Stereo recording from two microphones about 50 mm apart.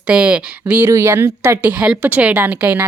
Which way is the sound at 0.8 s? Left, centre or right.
Right.